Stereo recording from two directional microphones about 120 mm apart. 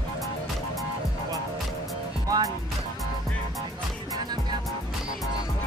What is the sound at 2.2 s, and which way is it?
Music, 30° right (ahead or behind).